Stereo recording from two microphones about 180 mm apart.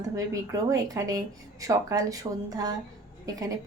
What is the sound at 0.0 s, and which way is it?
Speech, 20° right (ahead or behind).